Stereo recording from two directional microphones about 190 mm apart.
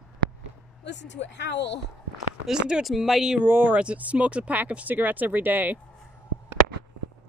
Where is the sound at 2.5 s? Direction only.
5° right (ahead or behind).